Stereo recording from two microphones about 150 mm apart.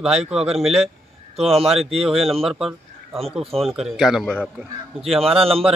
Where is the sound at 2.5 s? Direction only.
5° right (ahead or behind).